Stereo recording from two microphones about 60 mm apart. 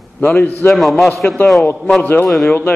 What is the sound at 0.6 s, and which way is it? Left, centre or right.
Speech, left.